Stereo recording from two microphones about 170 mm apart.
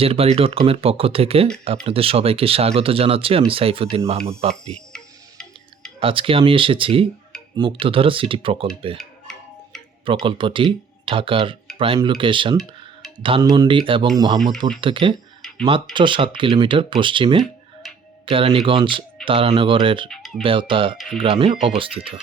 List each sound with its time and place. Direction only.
0.0 s speech: 35° right (ahead or behind)
4.9 s tick-tock: 5° left (ahead or behind)
6.0 s speech: 30° right (ahead or behind)
10.2 s speech: 30° right (ahead or behind)
15.4 s tick-tock: 5° left (ahead or behind)
15.6 s speech: 30° right (ahead or behind)
17.8 s tick-tock: centre (ahead or behind)
18.3 s speech: 30° right (ahead or behind)
20.1 s a sound: centre (ahead or behind)
20.4 s speech: 30° right (ahead or behind)